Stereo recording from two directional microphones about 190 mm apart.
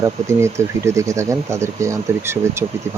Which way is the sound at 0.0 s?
15° right (ahead or behind).